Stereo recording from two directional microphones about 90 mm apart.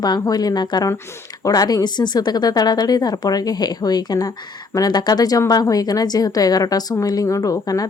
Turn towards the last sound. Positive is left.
turn(degrees=40)  # may be behind; listen again after turning